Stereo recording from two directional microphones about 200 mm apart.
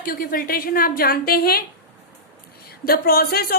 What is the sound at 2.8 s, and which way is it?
Speech, 50° left (ahead or behind).